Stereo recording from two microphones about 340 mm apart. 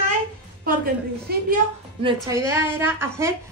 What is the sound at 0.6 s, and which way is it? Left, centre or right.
Speech, right.